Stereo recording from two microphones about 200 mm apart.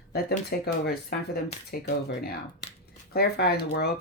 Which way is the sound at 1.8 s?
60° left (ahead or behind).